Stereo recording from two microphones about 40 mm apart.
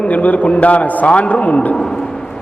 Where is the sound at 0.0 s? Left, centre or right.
Left.